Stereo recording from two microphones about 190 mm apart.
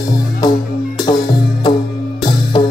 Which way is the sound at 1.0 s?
20° left (ahead or behind).